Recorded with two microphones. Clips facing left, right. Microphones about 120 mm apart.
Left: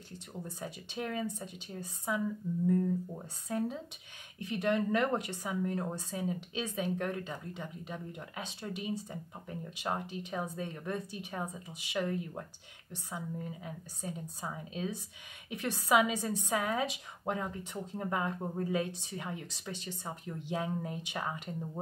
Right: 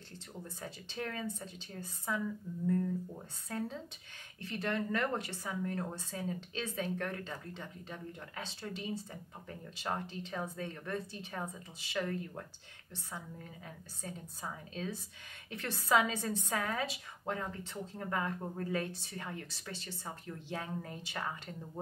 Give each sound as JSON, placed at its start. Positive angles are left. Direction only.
{"t": 0.1, "sound": "speech", "side_deg": 15}
{"t": 13.7, "sound": "speech", "side_deg": 15}